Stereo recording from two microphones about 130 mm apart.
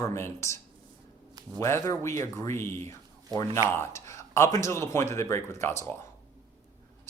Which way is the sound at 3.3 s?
30° right (ahead or behind).